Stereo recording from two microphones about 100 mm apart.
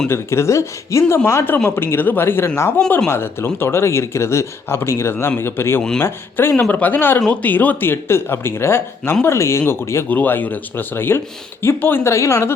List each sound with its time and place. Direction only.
0.1 s speech: 25° left (ahead or behind)